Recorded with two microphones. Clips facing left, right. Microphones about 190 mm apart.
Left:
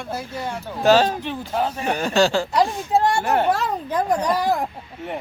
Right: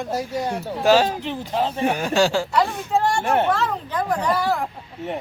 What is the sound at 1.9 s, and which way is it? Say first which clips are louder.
Speech: left 4 dB; 10° right (ahead or behind).